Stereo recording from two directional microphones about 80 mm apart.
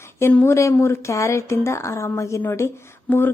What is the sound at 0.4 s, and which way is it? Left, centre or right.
A woman's voice, left.